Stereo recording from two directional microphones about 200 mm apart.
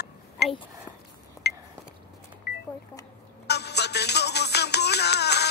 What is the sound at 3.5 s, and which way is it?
Music, 55° left (ahead or behind).